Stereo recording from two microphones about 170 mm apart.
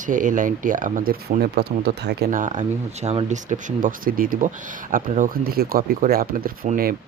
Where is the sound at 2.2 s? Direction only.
50° right (ahead or behind).